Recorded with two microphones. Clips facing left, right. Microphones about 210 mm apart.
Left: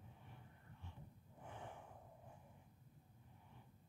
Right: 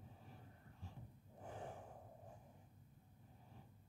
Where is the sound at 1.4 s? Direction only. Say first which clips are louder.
Right 3 dB; 40° right (ahead or behind).